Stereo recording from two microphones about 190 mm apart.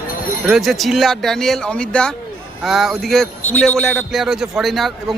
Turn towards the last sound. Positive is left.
turn(degrees=0)  # may be behind; listen again after turning